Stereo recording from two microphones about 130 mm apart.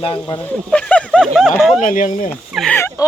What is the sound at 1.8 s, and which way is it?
Speech, 85° left.